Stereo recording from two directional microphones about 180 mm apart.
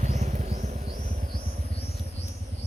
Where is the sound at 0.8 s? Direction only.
55° right (ahead or behind).